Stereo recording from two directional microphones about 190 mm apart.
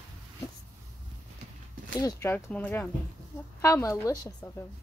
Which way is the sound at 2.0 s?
15° left (ahead or behind).